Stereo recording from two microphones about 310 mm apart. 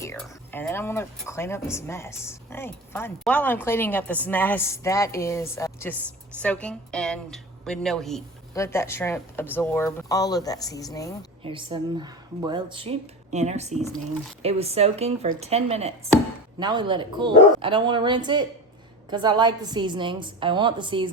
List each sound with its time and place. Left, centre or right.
0.0 s speech: centre
11.4 s speech: centre